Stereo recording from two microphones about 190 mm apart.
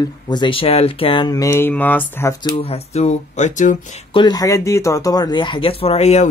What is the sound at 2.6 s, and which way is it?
Speech, 35° left (ahead or behind).